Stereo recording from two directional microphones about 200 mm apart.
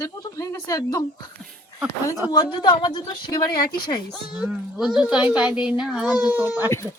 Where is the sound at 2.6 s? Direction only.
20° left (ahead or behind).